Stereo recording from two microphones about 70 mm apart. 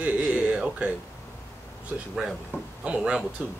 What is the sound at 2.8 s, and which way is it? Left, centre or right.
Speech, centre.